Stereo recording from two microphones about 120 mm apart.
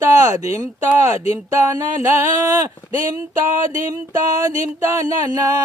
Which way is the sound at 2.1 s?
30° right (ahead or behind).